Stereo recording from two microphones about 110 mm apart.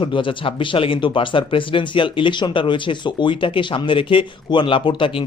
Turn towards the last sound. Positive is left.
turn(degrees=50)  # may be behind; listen again after turning